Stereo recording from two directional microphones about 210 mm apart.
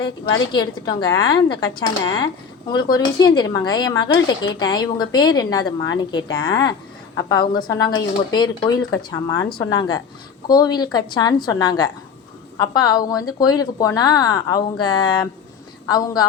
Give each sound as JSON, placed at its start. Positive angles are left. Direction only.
{"t": 0.5, "sound": "a woman's voice", "side_deg": 20}